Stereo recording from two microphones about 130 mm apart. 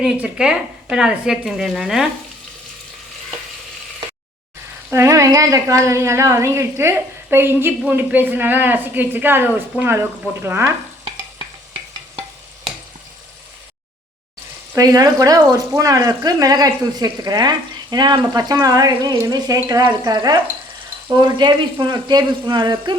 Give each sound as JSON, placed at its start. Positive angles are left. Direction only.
{"t": 0.0, "sound": "speech", "side_deg": -5}
{"t": 4.9, "sound": "a woman's voice", "side_deg": -25}
{"t": 14.8, "sound": "a woman's voice", "side_deg": -30}